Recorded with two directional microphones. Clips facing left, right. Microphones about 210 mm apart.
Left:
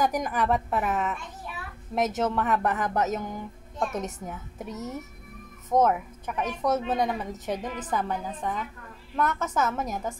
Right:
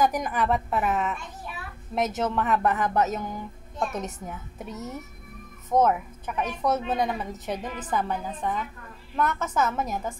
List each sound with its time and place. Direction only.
0.0 s a woman's voice: 40° left (ahead or behind)